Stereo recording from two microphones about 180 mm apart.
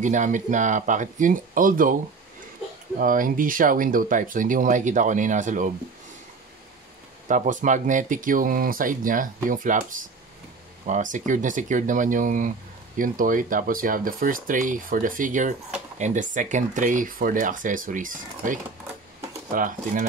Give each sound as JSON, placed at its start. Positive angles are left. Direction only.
{"t": 0.0, "sound": "speech", "side_deg": -45}
{"t": 3.0, "sound": "speech", "side_deg": -50}
{"t": 7.2, "sound": "speech", "side_deg": -45}